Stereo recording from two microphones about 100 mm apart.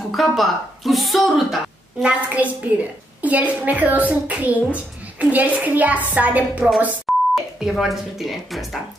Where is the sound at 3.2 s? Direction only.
15° right (ahead or behind).